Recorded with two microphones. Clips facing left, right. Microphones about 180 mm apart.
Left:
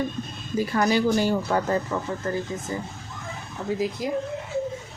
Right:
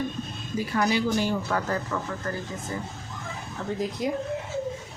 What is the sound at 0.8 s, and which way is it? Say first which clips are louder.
Speech: left 3 dB; 45° left (ahead or behind).